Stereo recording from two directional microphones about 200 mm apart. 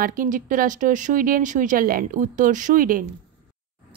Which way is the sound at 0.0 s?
40° right (ahead or behind).